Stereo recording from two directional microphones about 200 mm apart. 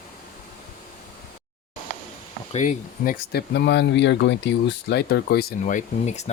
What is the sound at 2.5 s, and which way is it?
Speech, 40° left (ahead or behind).